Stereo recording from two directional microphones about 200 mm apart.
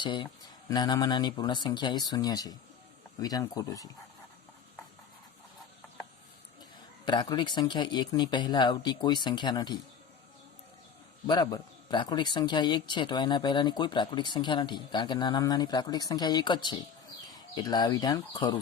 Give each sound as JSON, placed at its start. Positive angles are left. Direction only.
{"t": 0.0, "sound": "a man's voice", "side_deg": 25}
{"t": 7.0, "sound": "a man's voice", "side_deg": 20}
{"t": 11.3, "sound": "a man's voice", "side_deg": 20}